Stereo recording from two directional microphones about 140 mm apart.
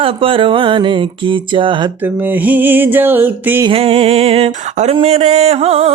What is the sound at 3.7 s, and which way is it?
Music, 40° right (ahead or behind).